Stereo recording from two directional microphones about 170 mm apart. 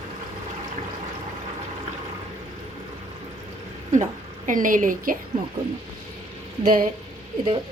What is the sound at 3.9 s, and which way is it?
A woman's voice, 45° right (ahead or behind).